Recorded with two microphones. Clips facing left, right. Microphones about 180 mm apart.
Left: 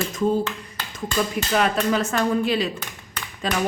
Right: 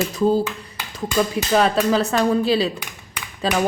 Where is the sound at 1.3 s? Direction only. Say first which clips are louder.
Right 4 dB; 30° right (ahead or behind).